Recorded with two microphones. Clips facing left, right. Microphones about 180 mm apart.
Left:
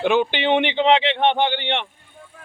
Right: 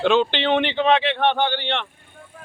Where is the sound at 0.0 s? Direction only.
10° left (ahead or behind).